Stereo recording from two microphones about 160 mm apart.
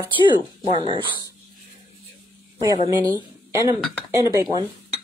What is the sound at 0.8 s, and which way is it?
Speech, 30° right (ahead or behind).